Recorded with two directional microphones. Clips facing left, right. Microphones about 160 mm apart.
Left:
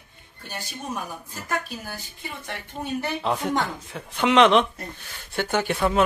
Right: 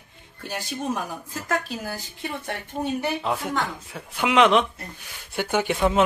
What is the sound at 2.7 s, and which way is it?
Speech, 45° right (ahead or behind).